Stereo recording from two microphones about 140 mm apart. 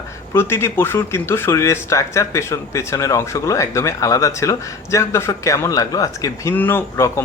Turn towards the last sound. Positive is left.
turn(degrees=20)  # may be behind; listen again after turning